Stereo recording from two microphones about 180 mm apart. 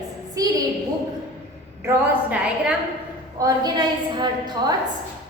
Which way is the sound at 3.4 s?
25° right (ahead or behind).